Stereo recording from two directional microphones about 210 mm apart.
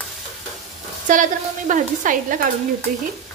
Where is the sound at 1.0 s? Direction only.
40° right (ahead or behind).